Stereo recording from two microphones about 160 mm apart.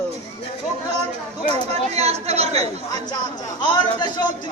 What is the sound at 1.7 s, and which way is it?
Speech, 40° right (ahead or behind).